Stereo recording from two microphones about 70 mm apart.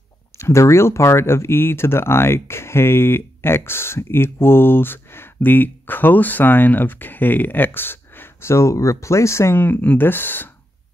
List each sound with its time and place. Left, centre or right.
0.4 s speech: left